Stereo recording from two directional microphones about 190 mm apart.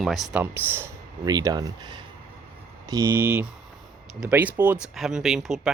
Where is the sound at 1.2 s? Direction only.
20° right (ahead or behind).